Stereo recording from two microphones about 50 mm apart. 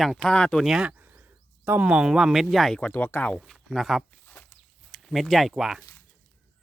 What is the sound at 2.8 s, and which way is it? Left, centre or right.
Speech, left.